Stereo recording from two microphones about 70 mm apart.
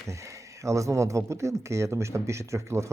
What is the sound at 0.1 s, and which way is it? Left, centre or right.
Speech, right.